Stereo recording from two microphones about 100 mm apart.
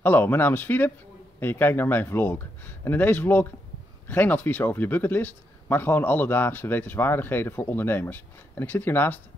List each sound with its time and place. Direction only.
0.0 s speech: 20° left (ahead or behind)